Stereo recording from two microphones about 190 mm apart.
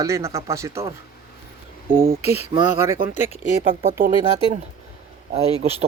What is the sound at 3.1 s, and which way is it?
Speech, 40° left (ahead or behind).